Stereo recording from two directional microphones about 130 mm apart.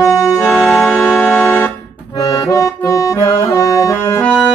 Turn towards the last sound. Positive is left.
turn(degrees=10)  # may be behind; listen again after turning